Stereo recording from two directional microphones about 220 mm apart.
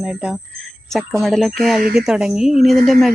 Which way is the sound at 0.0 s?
5° right (ahead or behind).